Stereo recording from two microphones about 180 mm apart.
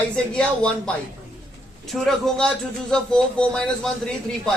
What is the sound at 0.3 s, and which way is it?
A man's voice, 5° left (ahead or behind).